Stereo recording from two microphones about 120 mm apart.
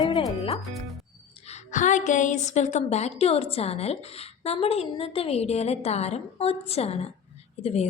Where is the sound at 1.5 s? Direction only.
90° left.